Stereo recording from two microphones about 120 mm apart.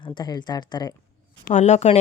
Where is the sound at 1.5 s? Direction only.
75° left (ahead or behind).